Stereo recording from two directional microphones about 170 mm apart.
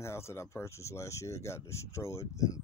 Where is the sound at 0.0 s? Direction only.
15° left (ahead or behind).